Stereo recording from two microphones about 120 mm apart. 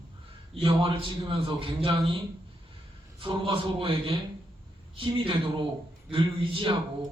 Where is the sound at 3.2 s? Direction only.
50° right (ahead or behind).